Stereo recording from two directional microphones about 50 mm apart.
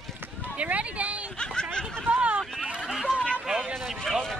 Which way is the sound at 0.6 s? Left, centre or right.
Right.